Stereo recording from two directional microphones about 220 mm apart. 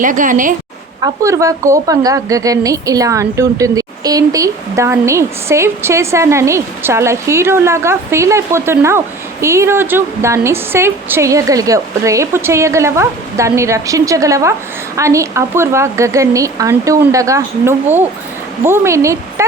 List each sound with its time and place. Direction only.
0.0 s a woman's voice: 35° right (ahead or behind)
1.0 s a woman's voice: 15° right (ahead or behind)